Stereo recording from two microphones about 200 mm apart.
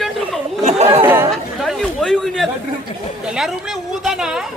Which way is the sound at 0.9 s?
10° right (ahead or behind).